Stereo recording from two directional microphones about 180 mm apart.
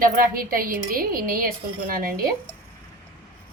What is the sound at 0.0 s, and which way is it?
A woman's voice, 50° right (ahead or behind).